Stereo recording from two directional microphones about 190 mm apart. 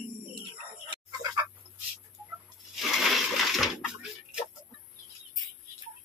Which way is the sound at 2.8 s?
Centre (ahead or behind).